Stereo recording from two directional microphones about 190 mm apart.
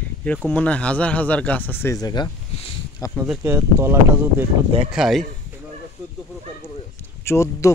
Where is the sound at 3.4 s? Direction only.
15° right (ahead or behind).